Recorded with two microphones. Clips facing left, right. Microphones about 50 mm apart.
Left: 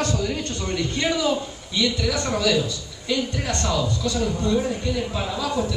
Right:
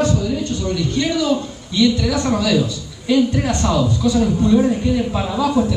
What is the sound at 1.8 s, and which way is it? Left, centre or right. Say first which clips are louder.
A man's voice: right 7 dB; centre.